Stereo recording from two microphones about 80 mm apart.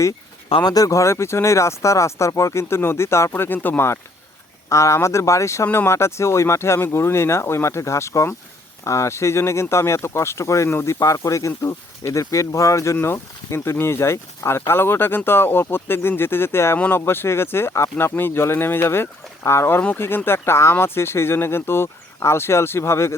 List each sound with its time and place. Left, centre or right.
0.6 s speech: left
4.7 s speech: left